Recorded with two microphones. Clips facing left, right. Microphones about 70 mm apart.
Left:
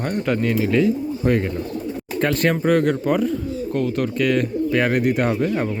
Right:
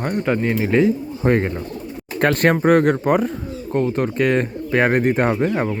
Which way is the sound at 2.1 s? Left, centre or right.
Right.